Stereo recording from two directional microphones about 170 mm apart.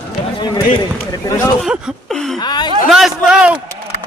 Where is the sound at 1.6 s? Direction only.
Centre (ahead or behind).